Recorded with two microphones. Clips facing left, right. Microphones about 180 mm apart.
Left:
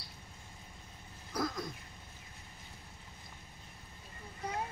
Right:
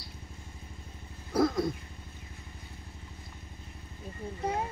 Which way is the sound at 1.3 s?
30° right (ahead or behind).